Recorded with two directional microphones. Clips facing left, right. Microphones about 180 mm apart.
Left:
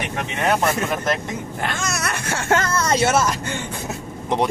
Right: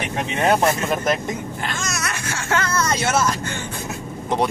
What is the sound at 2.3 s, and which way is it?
Speech, 55° left (ahead or behind).